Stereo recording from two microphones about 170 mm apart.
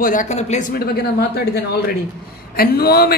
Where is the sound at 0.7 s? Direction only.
65° left (ahead or behind).